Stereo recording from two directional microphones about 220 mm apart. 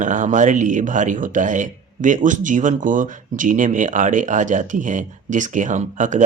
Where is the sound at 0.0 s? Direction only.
35° right (ahead or behind).